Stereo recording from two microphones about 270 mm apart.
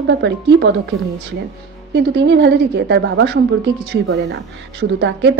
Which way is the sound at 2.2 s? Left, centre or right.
Right.